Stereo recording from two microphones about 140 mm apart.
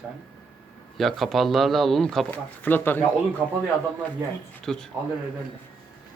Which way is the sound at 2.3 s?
15° left (ahead or behind).